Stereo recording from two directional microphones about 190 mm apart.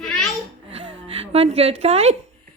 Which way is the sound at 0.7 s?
30° right (ahead or behind).